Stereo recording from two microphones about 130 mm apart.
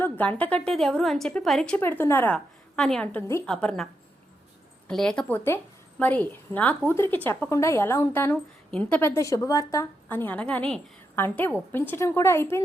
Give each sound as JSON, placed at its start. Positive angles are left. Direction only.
{"t": 0.0, "sound": "a woman's voice", "side_deg": 10}
{"t": 1.8, "sound": "a woman's voice", "side_deg": 15}
{"t": 2.7, "sound": "a woman's voice", "side_deg": 5}
{"t": 4.9, "sound": "a woman's voice", "side_deg": 5}